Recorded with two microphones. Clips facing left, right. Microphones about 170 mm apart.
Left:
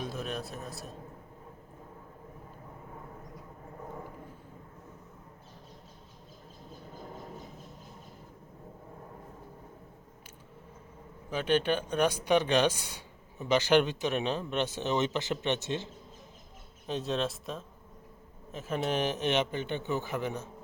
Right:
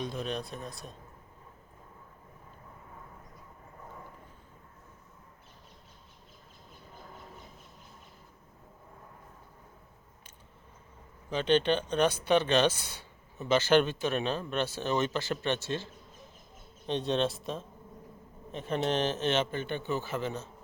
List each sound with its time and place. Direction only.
0.0 s a man's voice: 5° left (ahead or behind)
11.3 s a man's voice: 10° left (ahead or behind)
16.8 s a man's voice: 5° left (ahead or behind)